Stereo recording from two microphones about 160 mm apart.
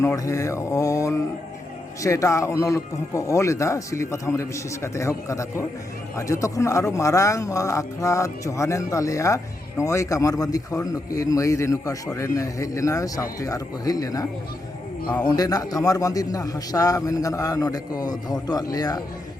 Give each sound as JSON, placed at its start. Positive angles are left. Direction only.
{"t": 0.0, "sound": "speech", "side_deg": 20}
{"t": 15.3, "sound": "speech", "side_deg": 25}